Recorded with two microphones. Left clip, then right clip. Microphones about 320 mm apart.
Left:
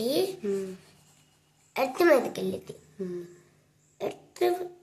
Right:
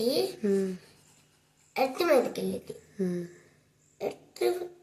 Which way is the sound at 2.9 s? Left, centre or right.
Centre.